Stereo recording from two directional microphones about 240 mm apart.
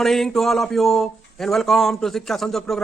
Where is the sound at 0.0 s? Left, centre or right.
Centre.